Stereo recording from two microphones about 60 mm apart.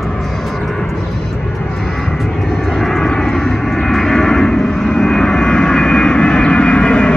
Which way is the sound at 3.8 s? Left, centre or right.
Centre.